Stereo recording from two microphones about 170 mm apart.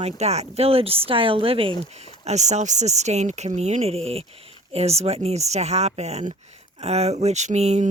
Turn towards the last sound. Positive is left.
turn(degrees=-40)  # may be behind; listen again after turning